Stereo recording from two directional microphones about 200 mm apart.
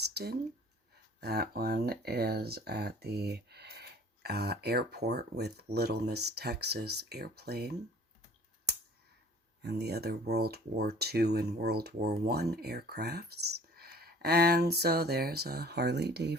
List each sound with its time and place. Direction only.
0.1 s speech: 55° right (ahead or behind)
9.6 s speech: 55° right (ahead or behind)